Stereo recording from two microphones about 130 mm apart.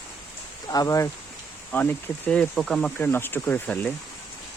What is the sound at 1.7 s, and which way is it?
Speech, 15° left (ahead or behind).